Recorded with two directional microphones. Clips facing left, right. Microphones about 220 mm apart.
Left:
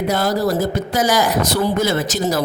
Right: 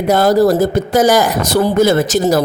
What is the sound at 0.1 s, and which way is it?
A woman's voice, 50° right (ahead or behind).